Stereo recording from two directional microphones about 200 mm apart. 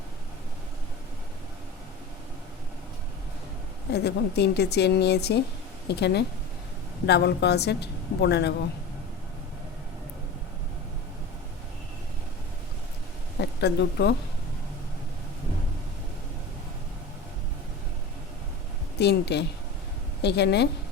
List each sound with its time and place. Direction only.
3.9 s a woman's voice: 55° left (ahead or behind)
13.4 s a woman's voice: 55° left (ahead or behind)
18.9 s a woman's voice: 55° left (ahead or behind)